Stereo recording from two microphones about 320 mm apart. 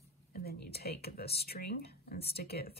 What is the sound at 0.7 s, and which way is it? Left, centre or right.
Speech, left.